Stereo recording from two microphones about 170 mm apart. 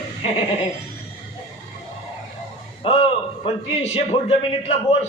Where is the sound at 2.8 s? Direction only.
30° left (ahead or behind).